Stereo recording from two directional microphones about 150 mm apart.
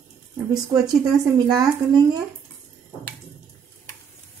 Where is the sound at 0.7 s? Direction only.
25° right (ahead or behind).